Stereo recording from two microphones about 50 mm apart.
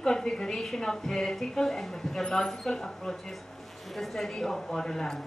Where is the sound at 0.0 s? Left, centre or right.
Centre.